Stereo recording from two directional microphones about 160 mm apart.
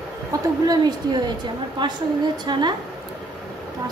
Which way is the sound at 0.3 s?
25° right (ahead or behind).